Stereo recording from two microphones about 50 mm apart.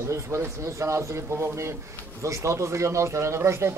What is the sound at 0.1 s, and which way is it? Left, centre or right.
A man's voice, right.